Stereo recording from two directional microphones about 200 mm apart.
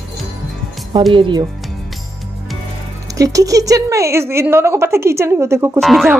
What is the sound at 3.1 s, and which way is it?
A woman's voice, 15° right (ahead or behind).